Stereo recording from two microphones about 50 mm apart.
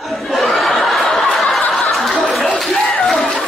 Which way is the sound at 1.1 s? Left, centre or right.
Centre.